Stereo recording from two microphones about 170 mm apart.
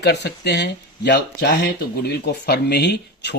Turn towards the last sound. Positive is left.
turn(degrees=85)